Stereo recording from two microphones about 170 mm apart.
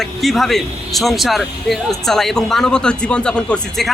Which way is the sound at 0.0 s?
Centre (ahead or behind).